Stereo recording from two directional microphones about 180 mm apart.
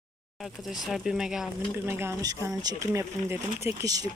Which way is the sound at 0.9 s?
Centre (ahead or behind).